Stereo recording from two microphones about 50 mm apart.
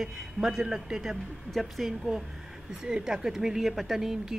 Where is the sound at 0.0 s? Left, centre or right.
Centre.